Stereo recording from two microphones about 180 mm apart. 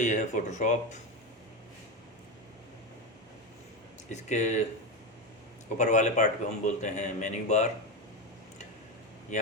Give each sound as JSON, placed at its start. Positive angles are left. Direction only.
{"t": 0.0, "sound": "speech", "side_deg": 40}
{"t": 4.1, "sound": "a man's voice", "side_deg": 40}
{"t": 5.7, "sound": "a man's voice", "side_deg": 40}
{"t": 9.3, "sound": "a man's voice", "side_deg": 40}